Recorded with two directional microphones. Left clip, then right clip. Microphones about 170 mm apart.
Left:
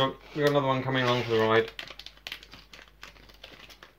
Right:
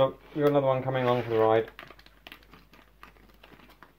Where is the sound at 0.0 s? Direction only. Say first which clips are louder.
Right 1 dB; 15° right (ahead or behind).